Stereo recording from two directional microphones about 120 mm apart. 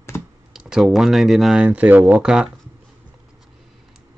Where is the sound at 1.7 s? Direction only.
15° right (ahead or behind).